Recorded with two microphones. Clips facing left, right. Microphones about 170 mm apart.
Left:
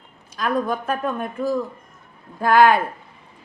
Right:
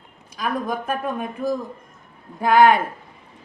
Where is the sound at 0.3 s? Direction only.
10° right (ahead or behind).